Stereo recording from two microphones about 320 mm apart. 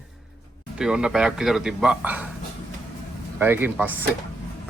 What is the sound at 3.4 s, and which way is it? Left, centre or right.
Speech, centre.